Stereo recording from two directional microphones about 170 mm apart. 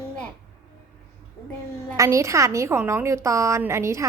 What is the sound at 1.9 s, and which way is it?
A woman's voice, 20° right (ahead or behind).